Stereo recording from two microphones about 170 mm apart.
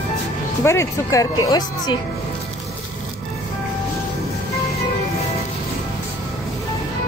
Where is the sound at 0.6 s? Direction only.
15° left (ahead or behind).